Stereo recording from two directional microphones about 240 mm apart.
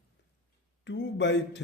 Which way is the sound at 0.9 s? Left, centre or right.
Left.